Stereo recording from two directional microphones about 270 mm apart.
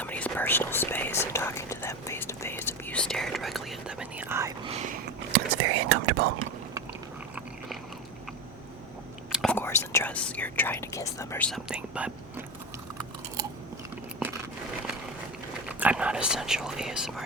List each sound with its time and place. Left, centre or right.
0.0 s whispering: centre
5.3 s whispering: right
9.3 s whispering: centre
15.8 s whispering: centre